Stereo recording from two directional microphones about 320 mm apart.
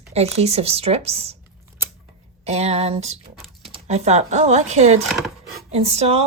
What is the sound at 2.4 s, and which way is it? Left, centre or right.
A woman's voice, centre.